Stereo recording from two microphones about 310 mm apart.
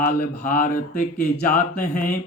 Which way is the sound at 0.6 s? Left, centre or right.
Left.